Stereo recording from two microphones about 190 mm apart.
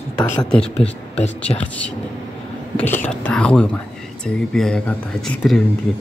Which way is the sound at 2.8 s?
10° left (ahead or behind).